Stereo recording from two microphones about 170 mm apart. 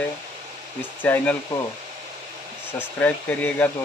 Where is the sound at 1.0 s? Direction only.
10° left (ahead or behind).